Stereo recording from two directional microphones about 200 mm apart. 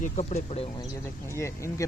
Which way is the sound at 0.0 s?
35° left (ahead or behind).